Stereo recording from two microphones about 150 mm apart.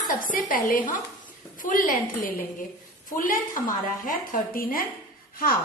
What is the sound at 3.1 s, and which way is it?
A woman's voice, 65° left (ahead or behind).